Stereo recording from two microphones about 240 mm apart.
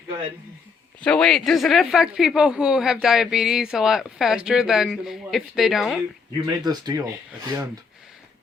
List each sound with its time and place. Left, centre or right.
1.0 s speech: centre
6.6 s speech: centre